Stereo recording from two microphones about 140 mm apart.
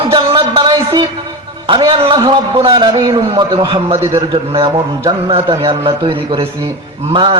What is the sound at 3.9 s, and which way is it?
Speech, 20° right (ahead or behind).